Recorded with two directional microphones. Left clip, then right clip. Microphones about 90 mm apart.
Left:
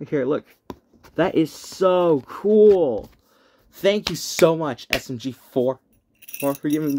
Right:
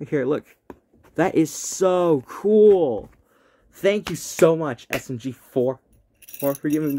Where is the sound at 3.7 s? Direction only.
20° left (ahead or behind).